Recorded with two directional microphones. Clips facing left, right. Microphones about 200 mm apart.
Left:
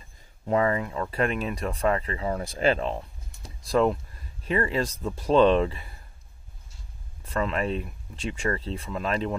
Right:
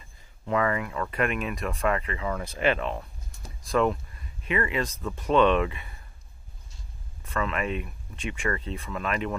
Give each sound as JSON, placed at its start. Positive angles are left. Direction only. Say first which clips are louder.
{"t": 0.5, "sound": "speech", "louder": "left 2 dB", "side_deg": 30}
{"t": 7.2, "sound": "speech", "louder": "left 2 dB", "side_deg": 35}